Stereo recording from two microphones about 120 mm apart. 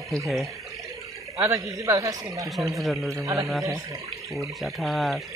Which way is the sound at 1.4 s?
25° right (ahead or behind).